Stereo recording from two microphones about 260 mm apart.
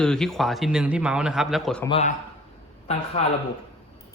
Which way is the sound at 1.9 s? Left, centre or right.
Left.